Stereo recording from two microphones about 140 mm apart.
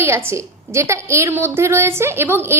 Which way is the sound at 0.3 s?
20° right (ahead or behind).